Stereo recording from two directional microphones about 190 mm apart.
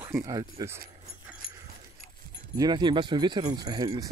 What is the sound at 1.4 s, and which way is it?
Dog, 30° left (ahead or behind).